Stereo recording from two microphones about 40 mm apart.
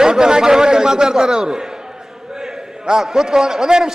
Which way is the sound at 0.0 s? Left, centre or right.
Centre.